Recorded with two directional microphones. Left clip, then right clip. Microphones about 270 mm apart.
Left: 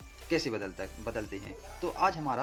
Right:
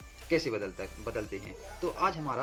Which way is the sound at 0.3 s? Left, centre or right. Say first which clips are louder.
Right 2 dB; centre.